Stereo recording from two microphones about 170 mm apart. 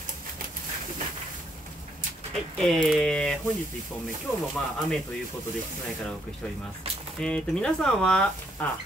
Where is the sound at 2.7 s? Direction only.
5° left (ahead or behind).